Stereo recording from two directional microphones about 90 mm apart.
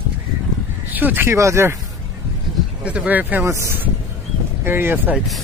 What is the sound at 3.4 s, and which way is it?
Speech, 30° right (ahead or behind).